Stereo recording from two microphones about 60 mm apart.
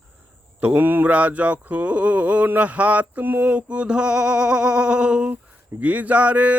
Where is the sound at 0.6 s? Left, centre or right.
Right.